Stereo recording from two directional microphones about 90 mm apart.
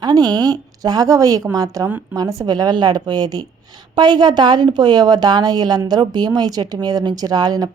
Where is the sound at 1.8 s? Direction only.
30° right (ahead or behind).